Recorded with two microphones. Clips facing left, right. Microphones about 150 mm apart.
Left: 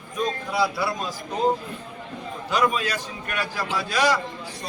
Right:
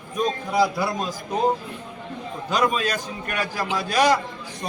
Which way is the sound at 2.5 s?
45° right (ahead or behind).